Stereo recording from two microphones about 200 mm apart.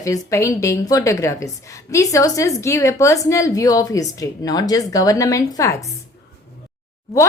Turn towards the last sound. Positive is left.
turn(degrees=0)  # may be behind; listen again after turning